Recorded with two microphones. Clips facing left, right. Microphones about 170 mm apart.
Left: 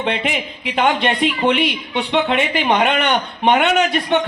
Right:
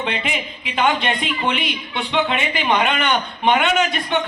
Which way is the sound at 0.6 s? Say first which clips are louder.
Left 2 dB; 60° left (ahead or behind).